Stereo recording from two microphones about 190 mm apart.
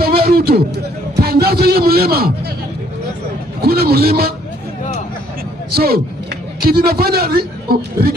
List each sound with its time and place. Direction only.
0.0 s a sound: 55° right (ahead or behind)
1.1 s music: 55° right (ahead or behind)
3.6 s a man's voice: 55° right (ahead or behind)
5.7 s a man's voice: 55° right (ahead or behind)